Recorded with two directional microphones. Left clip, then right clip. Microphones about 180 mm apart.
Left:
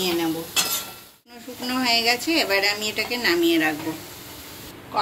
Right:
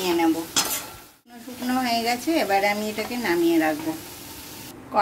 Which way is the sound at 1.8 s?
35° right (ahead or behind).